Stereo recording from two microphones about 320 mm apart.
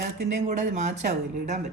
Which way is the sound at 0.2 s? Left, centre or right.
Right.